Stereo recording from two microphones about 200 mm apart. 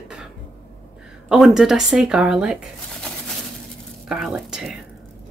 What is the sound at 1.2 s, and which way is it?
Speech, 5° right (ahead or behind).